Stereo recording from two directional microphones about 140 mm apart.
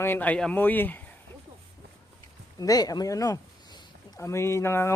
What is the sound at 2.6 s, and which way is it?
A man's voice, 25° left (ahead or behind).